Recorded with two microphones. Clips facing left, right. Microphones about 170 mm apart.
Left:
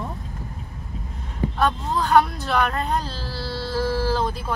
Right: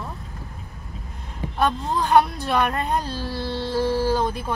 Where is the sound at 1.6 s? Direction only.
15° right (ahead or behind).